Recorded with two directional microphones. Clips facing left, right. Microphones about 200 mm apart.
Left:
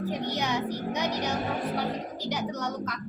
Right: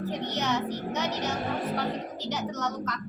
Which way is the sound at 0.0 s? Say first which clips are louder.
Left 1 dB; 10° left (ahead or behind).